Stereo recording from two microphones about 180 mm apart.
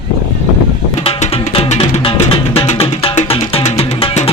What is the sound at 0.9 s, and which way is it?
Music, 35° left (ahead or behind).